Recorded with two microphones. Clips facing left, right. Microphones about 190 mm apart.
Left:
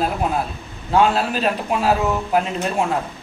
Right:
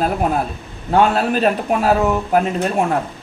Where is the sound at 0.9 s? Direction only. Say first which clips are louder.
Right 2 dB; 50° right (ahead or behind).